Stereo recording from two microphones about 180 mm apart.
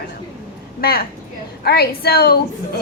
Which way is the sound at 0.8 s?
60° left (ahead or behind).